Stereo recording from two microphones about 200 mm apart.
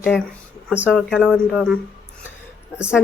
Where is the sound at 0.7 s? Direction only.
5° right (ahead or behind).